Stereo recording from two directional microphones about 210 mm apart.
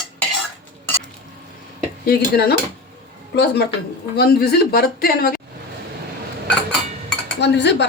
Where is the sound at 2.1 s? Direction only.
45° left (ahead or behind).